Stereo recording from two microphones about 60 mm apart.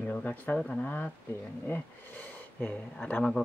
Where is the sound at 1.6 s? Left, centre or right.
Left.